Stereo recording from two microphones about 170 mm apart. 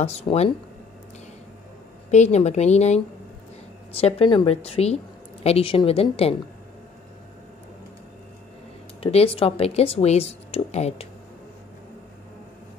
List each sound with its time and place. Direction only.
0.0 s speech: 40° left (ahead or behind)
2.0 s speech: 40° left (ahead or behind)
9.0 s speech: 35° left (ahead or behind)